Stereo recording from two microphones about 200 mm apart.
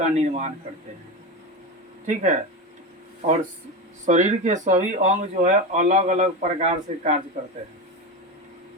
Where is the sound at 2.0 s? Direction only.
40° right (ahead or behind).